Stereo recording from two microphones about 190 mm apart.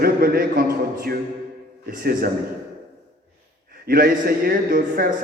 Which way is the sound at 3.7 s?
50° right (ahead or behind).